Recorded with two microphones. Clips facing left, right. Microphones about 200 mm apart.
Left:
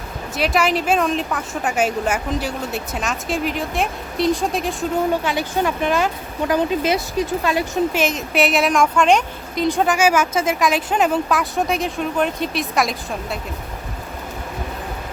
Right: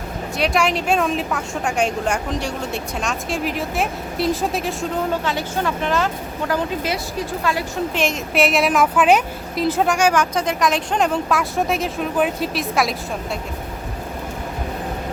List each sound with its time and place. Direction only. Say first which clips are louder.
0.3 s a woman's voice: left 1 dB; centre (ahead or behind)
5.2 s speech: left 2 dB; 15° left (ahead or behind)
7.9 s a woman's voice: even; centre (ahead or behind)